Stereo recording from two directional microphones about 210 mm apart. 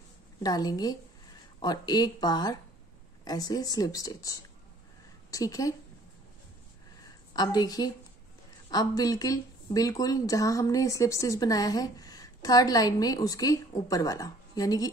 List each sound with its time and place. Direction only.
0.4 s speech: 20° left (ahead or behind)
7.3 s speech: 20° left (ahead or behind)